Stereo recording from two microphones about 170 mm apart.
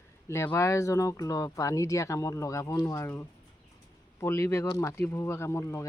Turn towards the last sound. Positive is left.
turn(degrees=15)  # may be behind; listen again after turning